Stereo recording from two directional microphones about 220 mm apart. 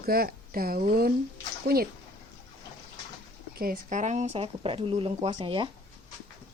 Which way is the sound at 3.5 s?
40° right (ahead or behind).